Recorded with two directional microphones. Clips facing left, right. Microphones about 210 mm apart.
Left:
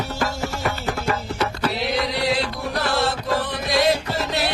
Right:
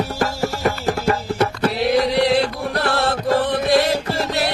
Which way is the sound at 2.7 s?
60° right (ahead or behind).